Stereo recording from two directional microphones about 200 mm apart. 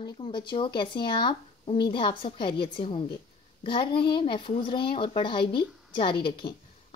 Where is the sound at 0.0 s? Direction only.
20° left (ahead or behind).